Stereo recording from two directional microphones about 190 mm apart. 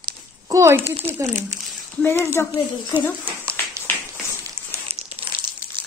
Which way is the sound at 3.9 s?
10° left (ahead or behind).